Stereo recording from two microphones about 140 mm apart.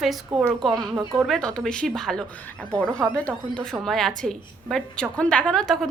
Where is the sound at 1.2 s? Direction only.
Centre (ahead or behind).